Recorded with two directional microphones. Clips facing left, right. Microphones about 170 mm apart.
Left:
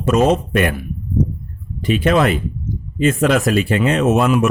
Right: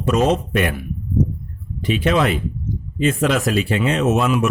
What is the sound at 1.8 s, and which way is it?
Speech, 50° left (ahead or behind).